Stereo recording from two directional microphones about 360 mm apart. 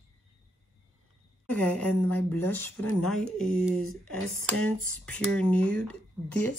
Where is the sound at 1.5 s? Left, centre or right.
Centre.